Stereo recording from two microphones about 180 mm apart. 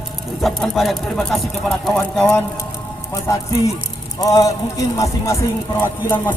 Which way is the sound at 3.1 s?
15° left (ahead or behind).